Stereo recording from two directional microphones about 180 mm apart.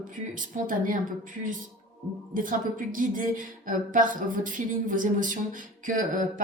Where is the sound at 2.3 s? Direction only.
50° right (ahead or behind).